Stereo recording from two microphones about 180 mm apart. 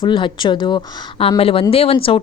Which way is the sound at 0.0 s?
25° left (ahead or behind).